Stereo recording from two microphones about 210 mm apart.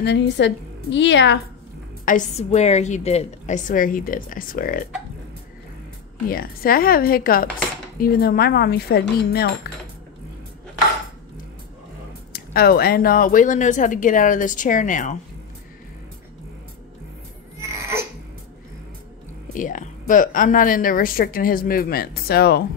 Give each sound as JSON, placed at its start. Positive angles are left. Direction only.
{"t": 0.0, "sound": "a woman's voice", "side_deg": 50}
{"t": 2.0, "sound": "speech", "side_deg": 35}
{"t": 6.2, "sound": "a woman's voice", "side_deg": 45}
{"t": 12.3, "sound": "speech", "side_deg": 45}
{"t": 17.6, "sound": "a sound", "side_deg": -15}
{"t": 19.5, "sound": "a woman's voice", "side_deg": 40}